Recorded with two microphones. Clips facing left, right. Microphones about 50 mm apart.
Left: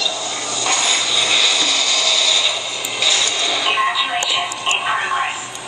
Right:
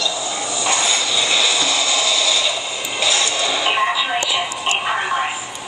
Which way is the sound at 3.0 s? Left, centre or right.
Centre.